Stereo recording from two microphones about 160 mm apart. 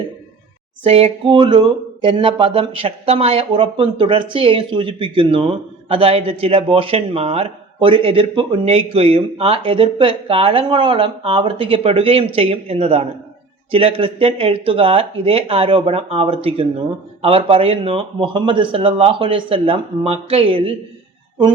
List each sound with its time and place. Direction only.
0.9 s speech: 40° right (ahead or behind)